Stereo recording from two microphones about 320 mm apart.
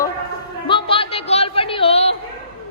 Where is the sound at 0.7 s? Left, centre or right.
Centre.